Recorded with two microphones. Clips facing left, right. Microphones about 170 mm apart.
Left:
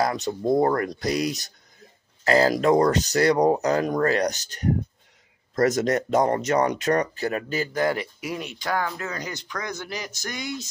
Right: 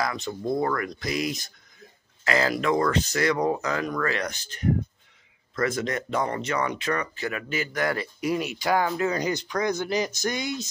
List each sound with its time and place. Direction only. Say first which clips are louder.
0.0 s speech: left 4 dB; 40° left (ahead or behind); by 8.1 s 25° left (ahead or behind)
8.2 s speech: right 5 dB; centre (ahead or behind); by 10.5 s 20° right (ahead or behind)